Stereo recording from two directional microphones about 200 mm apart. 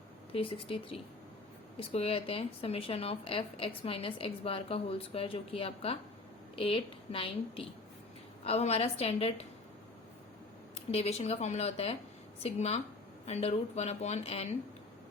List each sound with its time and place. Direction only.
0.3 s speech: 25° left (ahead or behind)
10.8 s speech: 30° left (ahead or behind)